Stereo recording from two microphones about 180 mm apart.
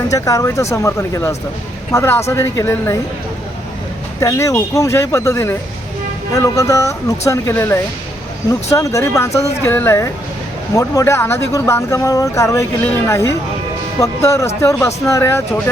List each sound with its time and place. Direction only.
0.1 s speech: 20° left (ahead or behind)
4.2 s speech: 15° left (ahead or behind)